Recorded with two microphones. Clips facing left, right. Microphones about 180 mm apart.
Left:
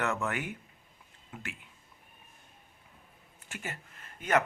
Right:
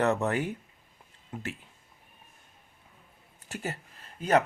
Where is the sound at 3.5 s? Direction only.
35° right (ahead or behind).